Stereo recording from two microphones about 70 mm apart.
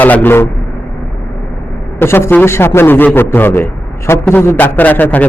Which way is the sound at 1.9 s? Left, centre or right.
Left.